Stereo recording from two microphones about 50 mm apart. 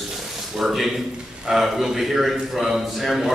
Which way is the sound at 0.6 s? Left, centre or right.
Centre.